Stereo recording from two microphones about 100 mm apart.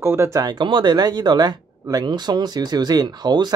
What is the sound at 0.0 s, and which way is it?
Speech, 25° right (ahead or behind).